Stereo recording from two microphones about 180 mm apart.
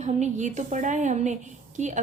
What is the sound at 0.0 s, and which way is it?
A woman's voice, 40° right (ahead or behind).